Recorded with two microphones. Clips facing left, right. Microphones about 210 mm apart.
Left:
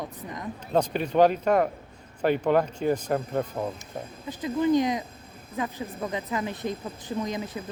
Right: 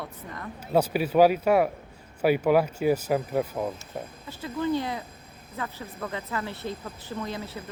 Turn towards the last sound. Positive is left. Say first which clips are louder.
# left 3 dB
turn(degrees=15)  # may be behind; listen again after turning